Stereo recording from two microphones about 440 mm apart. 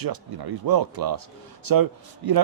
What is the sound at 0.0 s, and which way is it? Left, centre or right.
Speech, right.